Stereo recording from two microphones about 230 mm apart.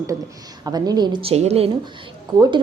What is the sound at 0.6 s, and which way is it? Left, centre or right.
A woman's voice, centre.